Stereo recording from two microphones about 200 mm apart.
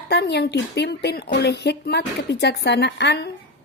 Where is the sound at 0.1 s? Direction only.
55° left (ahead or behind).